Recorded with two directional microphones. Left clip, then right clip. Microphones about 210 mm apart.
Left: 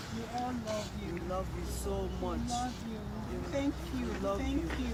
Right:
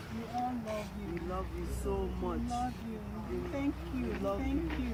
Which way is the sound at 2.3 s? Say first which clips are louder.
Left 1 dB; 35° left (ahead or behind).